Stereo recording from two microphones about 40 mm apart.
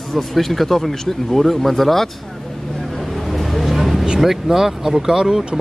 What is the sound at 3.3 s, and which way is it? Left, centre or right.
Vehicle, centre.